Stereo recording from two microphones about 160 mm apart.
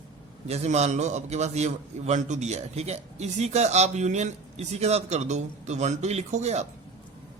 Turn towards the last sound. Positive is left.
turn(degrees=-45)  # may be behind; listen again after turning